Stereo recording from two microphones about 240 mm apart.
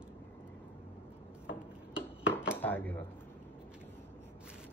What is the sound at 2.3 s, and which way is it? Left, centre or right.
Dishes, centre.